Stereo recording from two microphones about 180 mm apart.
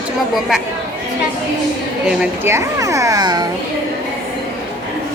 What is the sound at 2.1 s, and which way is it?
A child's voice, 10° right (ahead or behind).